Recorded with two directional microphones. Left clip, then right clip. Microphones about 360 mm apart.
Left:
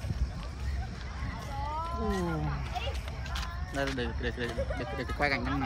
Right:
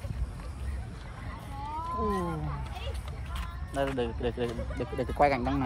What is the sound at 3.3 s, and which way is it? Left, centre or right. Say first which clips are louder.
Speech: right 2 dB; centre.